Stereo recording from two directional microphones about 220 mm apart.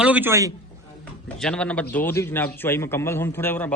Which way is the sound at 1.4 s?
5° left (ahead or behind).